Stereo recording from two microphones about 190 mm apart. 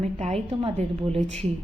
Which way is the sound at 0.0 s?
35° right (ahead or behind).